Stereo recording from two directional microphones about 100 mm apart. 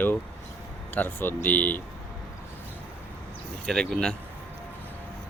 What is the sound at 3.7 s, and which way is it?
Speech, 10° left (ahead or behind).